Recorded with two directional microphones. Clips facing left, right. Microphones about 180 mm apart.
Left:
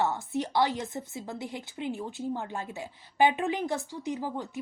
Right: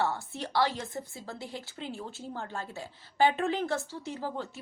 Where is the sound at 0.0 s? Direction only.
20° left (ahead or behind).